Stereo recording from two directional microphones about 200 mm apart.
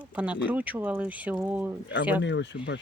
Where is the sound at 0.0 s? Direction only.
5° right (ahead or behind).